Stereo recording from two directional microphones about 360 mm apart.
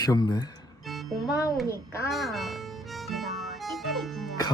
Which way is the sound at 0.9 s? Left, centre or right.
Centre.